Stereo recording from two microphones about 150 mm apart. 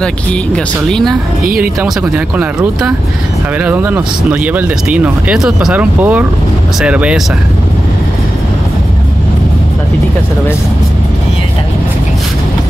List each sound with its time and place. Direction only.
0.8 s speech: 5° left (ahead or behind)
1.4 s speech: 75° right (ahead or behind)
1.8 s speech: 10° right (ahead or behind)